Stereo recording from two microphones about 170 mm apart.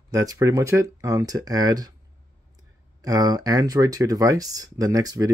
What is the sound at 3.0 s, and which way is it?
Speech, 20° right (ahead or behind).